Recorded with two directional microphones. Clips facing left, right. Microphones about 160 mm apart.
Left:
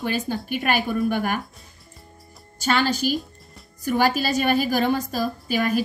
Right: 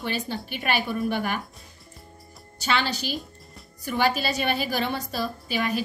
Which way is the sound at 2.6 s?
45° left (ahead or behind).